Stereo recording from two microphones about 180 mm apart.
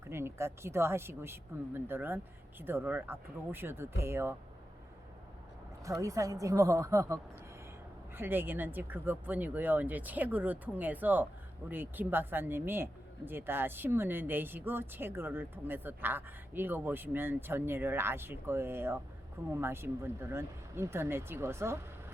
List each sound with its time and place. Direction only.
0.1 s speech: 15° right (ahead or behind)
6.0 s speech: 20° right (ahead or behind)